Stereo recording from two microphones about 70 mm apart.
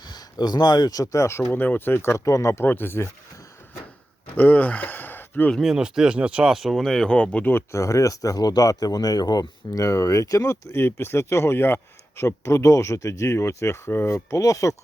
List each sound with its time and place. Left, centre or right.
0.1 s speech: left
1.5 s speech: left
2.6 s speech: left
4.4 s speech: left
5.5 s speech: centre
6.5 s speech: centre
6.8 s speech: centre
7.5 s speech: left
14.4 s speech: left